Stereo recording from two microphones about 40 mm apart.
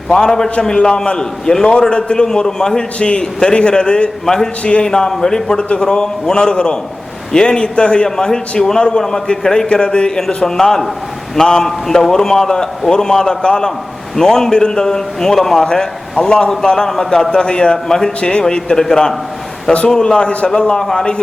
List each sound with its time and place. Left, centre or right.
0.2 s a man's voice: centre; by 4.9 s left
4.9 s a man's voice: centre
10.2 s a man's voice: centre
11.6 s a man's voice: centre